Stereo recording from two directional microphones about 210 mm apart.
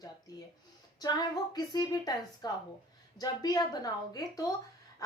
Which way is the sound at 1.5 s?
20° left (ahead or behind).